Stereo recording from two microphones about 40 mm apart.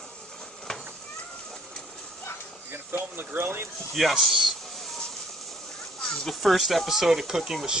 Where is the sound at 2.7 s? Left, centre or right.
Right.